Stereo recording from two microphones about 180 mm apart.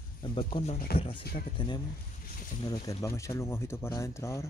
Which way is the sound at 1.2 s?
60° left (ahead or behind).